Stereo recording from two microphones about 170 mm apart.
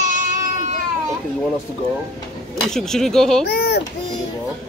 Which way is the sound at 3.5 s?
65° left (ahead or behind).